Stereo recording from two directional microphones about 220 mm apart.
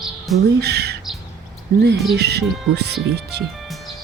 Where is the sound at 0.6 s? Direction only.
50° right (ahead or behind).